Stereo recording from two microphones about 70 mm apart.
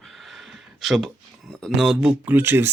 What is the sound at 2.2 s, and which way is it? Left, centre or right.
Speech, right.